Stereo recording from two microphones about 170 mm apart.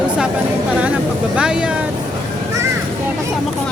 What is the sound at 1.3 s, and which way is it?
Speech, 5° right (ahead or behind).